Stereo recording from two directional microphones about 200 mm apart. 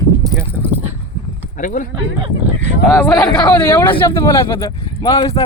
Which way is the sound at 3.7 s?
10° left (ahead or behind).